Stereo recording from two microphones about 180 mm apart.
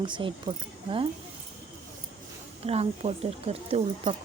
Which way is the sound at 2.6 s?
35° right (ahead or behind).